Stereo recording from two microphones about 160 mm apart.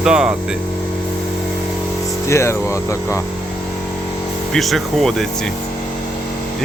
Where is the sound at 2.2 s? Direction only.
15° left (ahead or behind).